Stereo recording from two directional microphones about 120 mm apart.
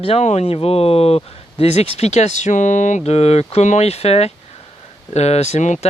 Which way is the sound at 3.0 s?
60° left (ahead or behind).